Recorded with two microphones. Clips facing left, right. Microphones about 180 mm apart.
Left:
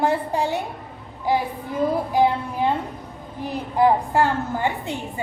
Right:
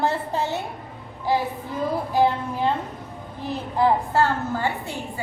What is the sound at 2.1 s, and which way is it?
A woman's voice, 15° left (ahead or behind).